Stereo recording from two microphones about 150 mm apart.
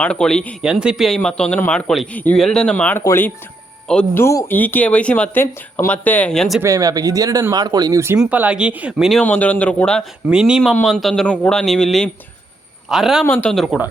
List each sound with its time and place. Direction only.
0.0 s speech: 5° left (ahead or behind)
3.8 s speech: 5° left (ahead or behind)
4.2 s speech: 20° left (ahead or behind); by 6.6 s 5° left (ahead or behind)
6.6 s speech: 20° right (ahead or behind)
8.2 s speech: 10° right (ahead or behind)
9.2 s speech: 10° left (ahead or behind)
10.2 s speech: 5° right (ahead or behind)
13.2 s speech: 10° left (ahead or behind)